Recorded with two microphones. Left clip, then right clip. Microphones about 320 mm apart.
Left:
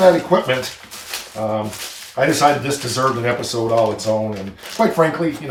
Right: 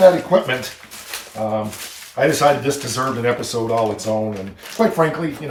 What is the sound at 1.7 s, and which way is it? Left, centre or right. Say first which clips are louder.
Speech: left 2 dB; centre.